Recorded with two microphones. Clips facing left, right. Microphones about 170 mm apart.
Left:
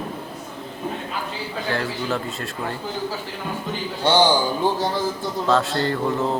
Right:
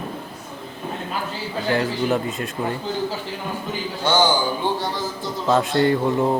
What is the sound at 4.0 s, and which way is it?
Speech, 30° left (ahead or behind).